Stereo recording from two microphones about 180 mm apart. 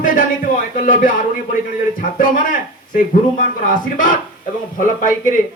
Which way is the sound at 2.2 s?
50° left (ahead or behind).